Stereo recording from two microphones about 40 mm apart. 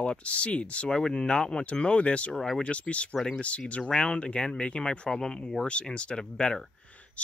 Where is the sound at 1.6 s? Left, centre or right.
Left.